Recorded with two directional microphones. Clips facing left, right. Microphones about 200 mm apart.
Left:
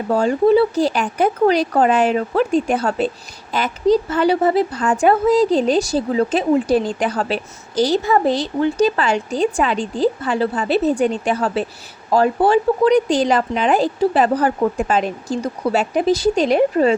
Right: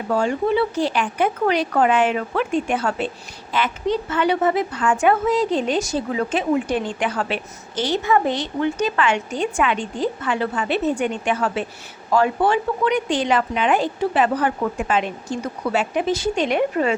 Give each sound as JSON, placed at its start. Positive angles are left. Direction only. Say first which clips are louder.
{"t": 0.1, "sound": "a woman's voice", "louder": "left 6 dB", "side_deg": 35}